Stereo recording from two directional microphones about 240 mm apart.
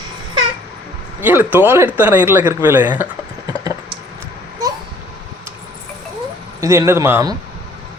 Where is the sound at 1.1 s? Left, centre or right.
Centre.